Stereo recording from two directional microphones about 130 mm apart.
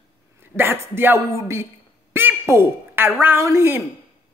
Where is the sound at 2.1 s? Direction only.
20° right (ahead or behind).